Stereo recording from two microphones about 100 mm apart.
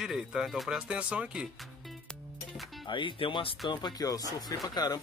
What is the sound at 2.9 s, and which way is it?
Speech, 55° left (ahead or behind).